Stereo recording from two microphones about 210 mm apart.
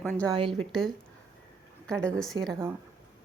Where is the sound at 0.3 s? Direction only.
20° right (ahead or behind).